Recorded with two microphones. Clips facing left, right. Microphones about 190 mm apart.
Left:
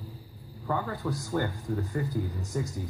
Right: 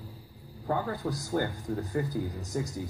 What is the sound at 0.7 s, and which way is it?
Speech, 40° right (ahead or behind).